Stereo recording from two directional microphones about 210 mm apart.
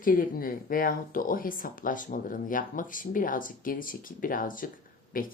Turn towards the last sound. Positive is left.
turn(degrees=40)  # may be behind; listen again after turning